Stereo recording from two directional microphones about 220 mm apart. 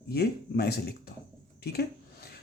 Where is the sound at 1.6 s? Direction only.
45° left (ahead or behind).